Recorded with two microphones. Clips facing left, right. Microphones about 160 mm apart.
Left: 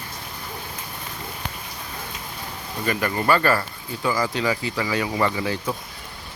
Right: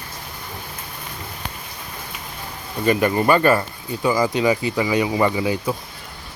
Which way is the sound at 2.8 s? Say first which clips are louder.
Right 6 dB; 20° right (ahead or behind).